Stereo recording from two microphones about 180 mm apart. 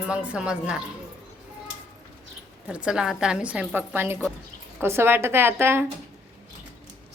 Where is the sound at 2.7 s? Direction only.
5° right (ahead or behind).